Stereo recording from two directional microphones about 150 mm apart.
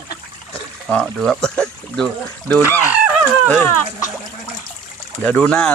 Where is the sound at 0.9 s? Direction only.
5° left (ahead or behind).